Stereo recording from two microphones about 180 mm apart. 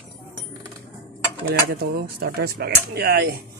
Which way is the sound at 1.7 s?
60° right (ahead or behind).